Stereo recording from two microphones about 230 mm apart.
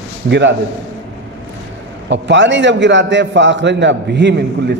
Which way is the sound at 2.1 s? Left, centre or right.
Right.